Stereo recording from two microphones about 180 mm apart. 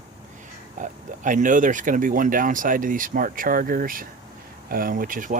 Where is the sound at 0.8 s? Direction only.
45° right (ahead or behind).